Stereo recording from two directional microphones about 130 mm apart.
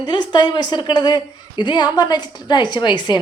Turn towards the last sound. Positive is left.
turn(degrees=35)  # may be behind; listen again after turning